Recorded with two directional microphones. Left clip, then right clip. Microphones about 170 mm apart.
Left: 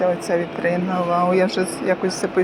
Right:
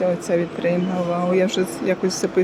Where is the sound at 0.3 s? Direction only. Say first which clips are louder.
Even; 30° right (ahead or behind).